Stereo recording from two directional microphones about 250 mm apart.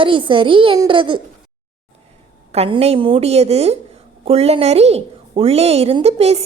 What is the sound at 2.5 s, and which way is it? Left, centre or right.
A woman's voice, right.